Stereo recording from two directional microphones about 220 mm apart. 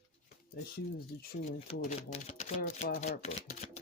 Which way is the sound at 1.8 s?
30° left (ahead or behind).